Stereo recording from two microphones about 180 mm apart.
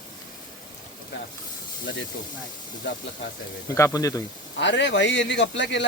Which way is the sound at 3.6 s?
15° left (ahead or behind).